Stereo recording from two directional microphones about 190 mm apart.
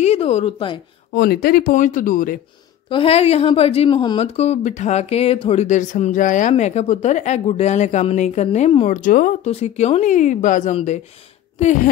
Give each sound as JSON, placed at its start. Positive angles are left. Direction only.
{"t": 0.0, "sound": "a woman's voice", "side_deg": 35}
{"t": 1.1, "sound": "speech", "side_deg": 55}
{"t": 2.9, "sound": "a woman's voice", "side_deg": 30}
{"t": 9.5, "sound": "a woman's voice", "side_deg": 35}